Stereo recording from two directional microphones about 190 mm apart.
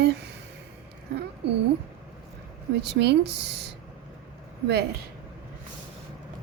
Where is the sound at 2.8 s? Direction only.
65° right (ahead or behind).